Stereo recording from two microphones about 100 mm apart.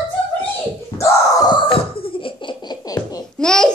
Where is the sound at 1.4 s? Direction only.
60° left (ahead or behind); by 3.2 s 45° left (ahead or behind).